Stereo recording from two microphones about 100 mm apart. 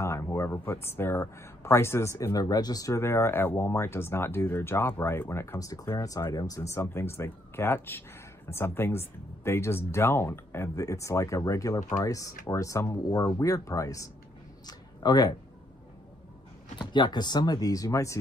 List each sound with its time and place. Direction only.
0.0 s speech: 25° left (ahead or behind); by 15.3 s 45° left (ahead or behind)
16.7 s speech: 50° left (ahead or behind); by 18.1 s 35° left (ahead or behind)